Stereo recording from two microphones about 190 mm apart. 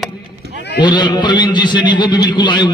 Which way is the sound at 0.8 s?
25° left (ahead or behind).